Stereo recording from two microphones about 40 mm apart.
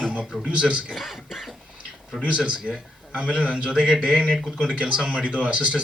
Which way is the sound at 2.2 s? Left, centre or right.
Right.